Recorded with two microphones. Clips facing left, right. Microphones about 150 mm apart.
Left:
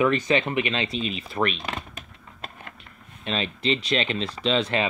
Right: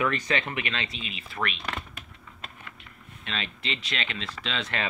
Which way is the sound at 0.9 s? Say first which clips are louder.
Left 8 dB; 35° left (ahead or behind).